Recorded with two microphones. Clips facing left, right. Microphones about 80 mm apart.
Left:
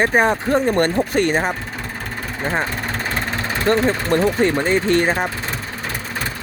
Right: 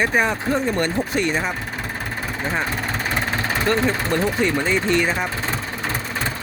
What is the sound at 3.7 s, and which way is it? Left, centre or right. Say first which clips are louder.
Speech: left 5 dB; left.